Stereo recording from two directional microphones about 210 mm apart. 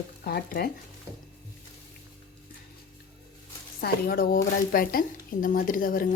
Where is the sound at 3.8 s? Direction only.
45° left (ahead or behind).